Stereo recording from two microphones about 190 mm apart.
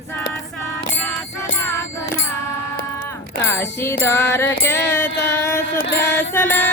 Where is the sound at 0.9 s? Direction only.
5° left (ahead or behind).